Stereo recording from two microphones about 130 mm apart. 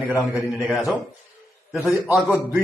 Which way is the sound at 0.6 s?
Centre (ahead or behind).